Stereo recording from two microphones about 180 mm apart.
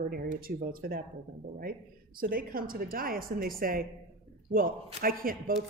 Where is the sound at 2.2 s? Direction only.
55° right (ahead or behind).